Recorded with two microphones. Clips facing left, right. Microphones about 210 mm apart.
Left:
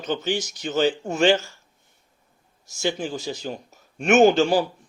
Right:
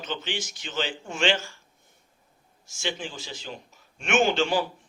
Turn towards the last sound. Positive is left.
turn(degrees=40)  # may be behind; listen again after turning